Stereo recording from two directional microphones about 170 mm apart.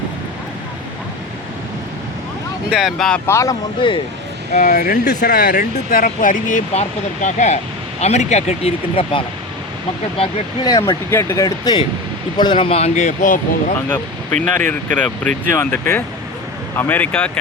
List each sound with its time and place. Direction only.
2.6 s speech: 5° right (ahead or behind)
3.2 s speech: 15° left (ahead or behind)
3.8 s speech: 30° left (ahead or behind)
4.5 s speech: 50° left (ahead or behind); by 9.2 s 35° left (ahead or behind)
10.2 s speech: 25° left (ahead or behind); by 13.4 s 50° left (ahead or behind)
13.7 s speech: 10° left (ahead or behind)